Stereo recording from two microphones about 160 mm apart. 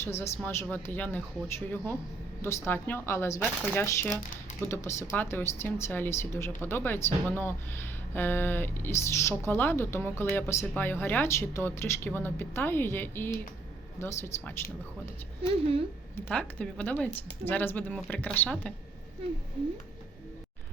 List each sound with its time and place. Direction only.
0.0 s speech: 15° left (ahead or behind)
16.3 s speech: 5° left (ahead or behind)